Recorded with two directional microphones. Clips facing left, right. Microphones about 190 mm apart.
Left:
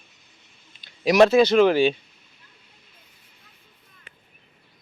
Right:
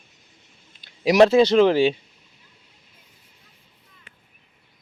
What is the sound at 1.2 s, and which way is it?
Speech, 30° right (ahead or behind).